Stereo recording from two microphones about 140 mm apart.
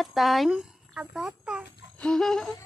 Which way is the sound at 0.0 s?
Centre (ahead or behind).